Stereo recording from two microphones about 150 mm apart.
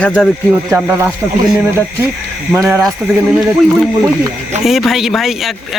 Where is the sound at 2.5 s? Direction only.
15° right (ahead or behind).